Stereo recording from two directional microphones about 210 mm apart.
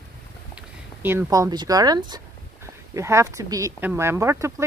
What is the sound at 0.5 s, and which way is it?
Speech, 10° right (ahead or behind).